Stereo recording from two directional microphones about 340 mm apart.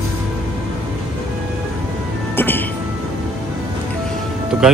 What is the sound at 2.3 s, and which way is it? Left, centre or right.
Speech, centre.